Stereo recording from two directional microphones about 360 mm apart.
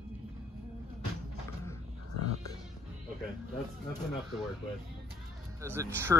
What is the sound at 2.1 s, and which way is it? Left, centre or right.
Music, left.